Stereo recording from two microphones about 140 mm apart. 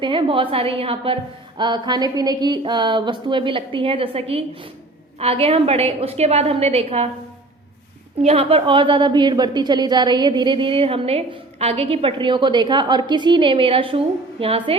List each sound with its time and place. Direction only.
0.0 s a woman's voice: 35° right (ahead or behind)
8.2 s a woman's voice: 45° right (ahead or behind)